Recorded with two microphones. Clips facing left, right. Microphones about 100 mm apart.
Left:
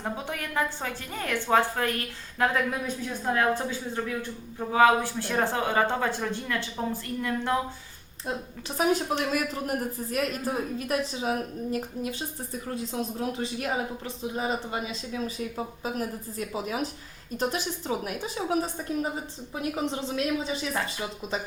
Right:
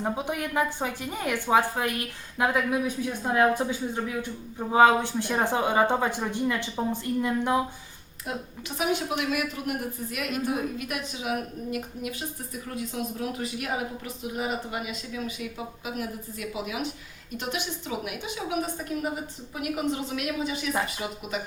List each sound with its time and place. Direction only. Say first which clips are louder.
0.0 s speech: right 4 dB; 15° right (ahead or behind)
8.8 s a woman's voice: left 2 dB; 35° left (ahead or behind)
19.7 s a man's voice: right 2 dB; 30° left (ahead or behind)